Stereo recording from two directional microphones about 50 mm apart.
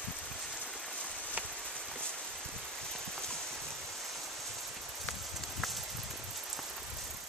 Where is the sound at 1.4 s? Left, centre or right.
Right.